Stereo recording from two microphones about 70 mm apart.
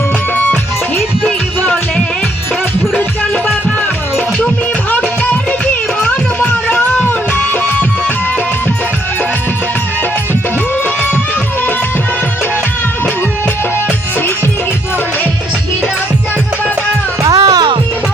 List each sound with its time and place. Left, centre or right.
4.9 s music: left
17.2 s music: right